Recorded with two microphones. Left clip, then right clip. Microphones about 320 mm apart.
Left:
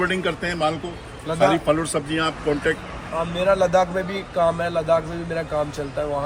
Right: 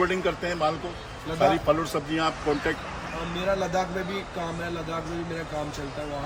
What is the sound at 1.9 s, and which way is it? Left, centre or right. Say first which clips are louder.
Speech: left 3 dB; centre.